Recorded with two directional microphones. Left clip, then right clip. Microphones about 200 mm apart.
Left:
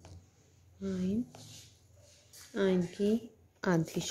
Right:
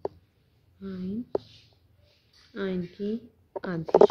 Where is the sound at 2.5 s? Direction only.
10° left (ahead or behind).